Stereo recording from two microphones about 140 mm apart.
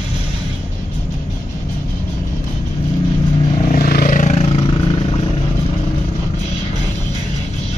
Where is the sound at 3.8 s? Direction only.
90° left; by 4.3 s 75° left (ahead or behind).